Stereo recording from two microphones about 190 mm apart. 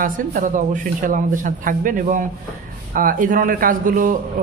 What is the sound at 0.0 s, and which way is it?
Speech, 45° right (ahead or behind).